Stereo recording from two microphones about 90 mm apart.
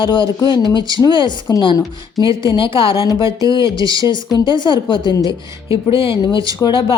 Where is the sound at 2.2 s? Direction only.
40° right (ahead or behind).